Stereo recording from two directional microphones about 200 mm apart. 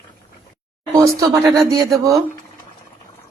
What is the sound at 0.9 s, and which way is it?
Speech, 15° right (ahead or behind).